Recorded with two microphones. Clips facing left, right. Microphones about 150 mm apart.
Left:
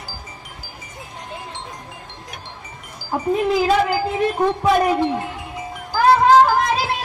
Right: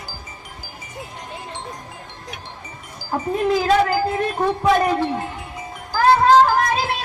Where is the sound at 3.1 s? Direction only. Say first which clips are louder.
Left 1 dB; centre (ahead or behind).